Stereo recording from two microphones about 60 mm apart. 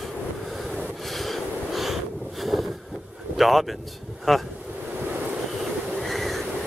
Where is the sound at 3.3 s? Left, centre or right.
Centre.